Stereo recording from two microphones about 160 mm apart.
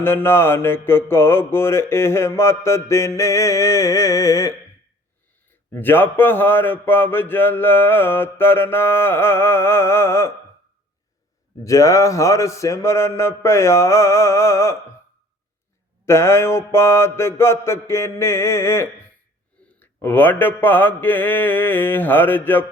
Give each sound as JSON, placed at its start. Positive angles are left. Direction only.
{"t": 0.0, "sound": "a man's voice", "side_deg": 15}
{"t": 5.7, "sound": "a man's voice", "side_deg": 15}
{"t": 11.6, "sound": "a man's voice", "side_deg": 20}
{"t": 16.0, "sound": "a man's voice", "side_deg": 15}